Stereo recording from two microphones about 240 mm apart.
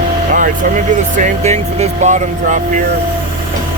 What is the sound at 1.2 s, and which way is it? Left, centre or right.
Speech, right.